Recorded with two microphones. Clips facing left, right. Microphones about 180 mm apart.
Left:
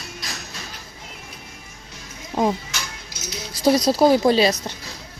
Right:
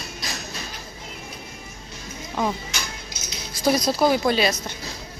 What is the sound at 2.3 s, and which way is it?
Speech, 30° left (ahead or behind).